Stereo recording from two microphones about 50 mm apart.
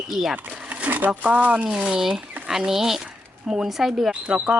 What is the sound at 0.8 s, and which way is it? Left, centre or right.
Speech, right.